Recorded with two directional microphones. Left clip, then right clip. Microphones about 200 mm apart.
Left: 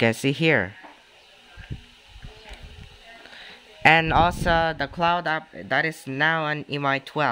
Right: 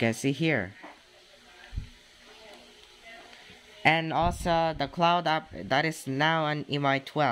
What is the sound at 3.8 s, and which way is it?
Speech, 25° left (ahead or behind).